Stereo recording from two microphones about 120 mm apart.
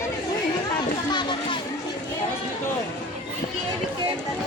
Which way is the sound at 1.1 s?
40° left (ahead or behind).